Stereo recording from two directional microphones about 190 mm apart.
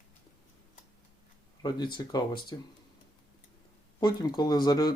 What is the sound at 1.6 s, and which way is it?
Speech, 20° left (ahead or behind).